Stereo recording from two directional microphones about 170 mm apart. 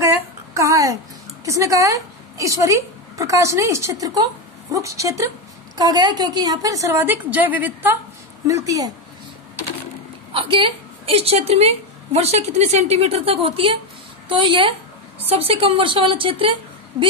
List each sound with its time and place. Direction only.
0.6 s a sound: 20° right (ahead or behind)
1.4 s a woman's voice: 20° right (ahead or behind)
10.3 s a woman's voice: 30° right (ahead or behind)